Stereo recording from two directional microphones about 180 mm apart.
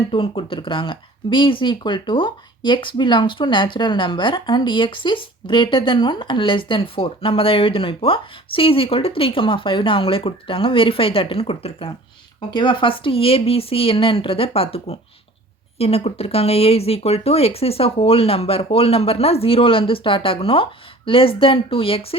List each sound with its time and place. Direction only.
0.1 s speech: 30° left (ahead or behind)